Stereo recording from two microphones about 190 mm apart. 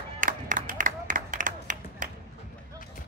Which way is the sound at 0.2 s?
45° right (ahead or behind).